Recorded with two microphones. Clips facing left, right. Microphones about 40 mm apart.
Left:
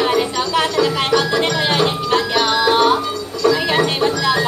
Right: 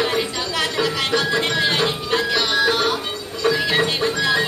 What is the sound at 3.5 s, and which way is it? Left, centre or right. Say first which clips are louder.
Music: left 3 dB; centre.